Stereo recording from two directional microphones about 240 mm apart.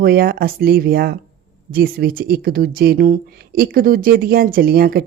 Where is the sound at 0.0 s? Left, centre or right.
Right.